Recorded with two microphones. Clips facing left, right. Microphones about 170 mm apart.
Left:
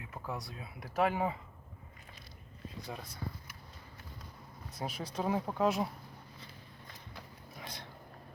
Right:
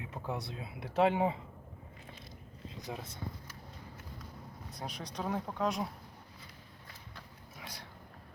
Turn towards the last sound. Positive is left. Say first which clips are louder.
# left 2 dB
turn(degrees=-10)  # may be behind; listen again after turning